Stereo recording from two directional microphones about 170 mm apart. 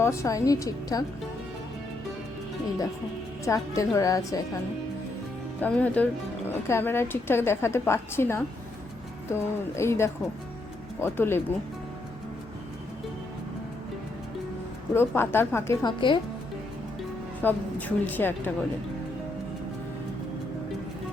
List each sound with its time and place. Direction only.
0.0 s a woman's voice: 15° left (ahead or behind)
3.4 s a woman's voice: 20° left (ahead or behind)
5.5 s a woman's voice: 10° left (ahead or behind)
14.9 s a woman's voice: 15° left (ahead or behind); by 16.2 s 30° left (ahead or behind)
17.4 s a woman's voice: 10° left (ahead or behind)